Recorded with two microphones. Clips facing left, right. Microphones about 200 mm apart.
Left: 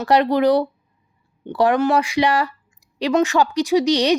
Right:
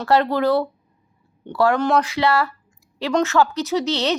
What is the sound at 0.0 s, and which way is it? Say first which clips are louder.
Speech: left 2 dB; 15° left (ahead or behind).